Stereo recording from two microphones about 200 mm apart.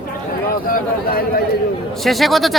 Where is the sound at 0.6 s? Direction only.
45° left (ahead or behind).